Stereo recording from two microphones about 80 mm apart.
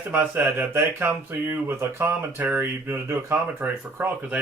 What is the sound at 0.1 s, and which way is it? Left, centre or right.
Speech, right.